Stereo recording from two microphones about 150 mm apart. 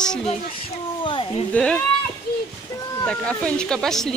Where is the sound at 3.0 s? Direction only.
5° left (ahead or behind).